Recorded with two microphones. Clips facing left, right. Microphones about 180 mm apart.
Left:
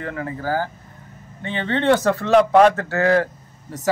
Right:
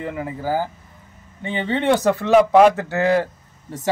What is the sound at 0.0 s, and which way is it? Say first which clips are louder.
Speech: right 1 dB; 10° right (ahead or behind).